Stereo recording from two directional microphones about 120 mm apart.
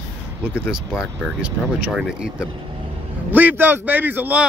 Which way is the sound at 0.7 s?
5° right (ahead or behind).